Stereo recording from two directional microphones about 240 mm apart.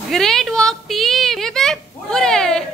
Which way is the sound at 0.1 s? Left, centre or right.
Centre.